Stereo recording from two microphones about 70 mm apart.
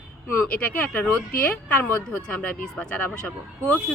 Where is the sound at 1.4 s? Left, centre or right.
Left.